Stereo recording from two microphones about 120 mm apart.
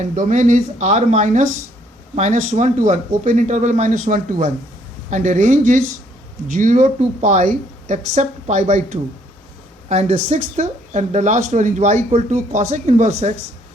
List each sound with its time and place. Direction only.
0.0 s speech: 90° right; by 9.0 s 75° right (ahead or behind)
9.9 s speech: 65° right (ahead or behind)